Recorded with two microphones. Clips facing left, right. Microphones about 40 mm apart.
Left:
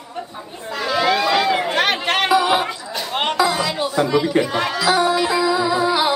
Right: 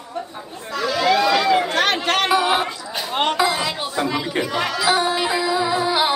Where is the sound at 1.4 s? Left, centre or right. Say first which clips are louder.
Even; centre.